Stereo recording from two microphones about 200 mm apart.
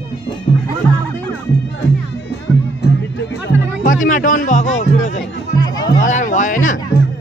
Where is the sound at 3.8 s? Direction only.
45° left (ahead or behind).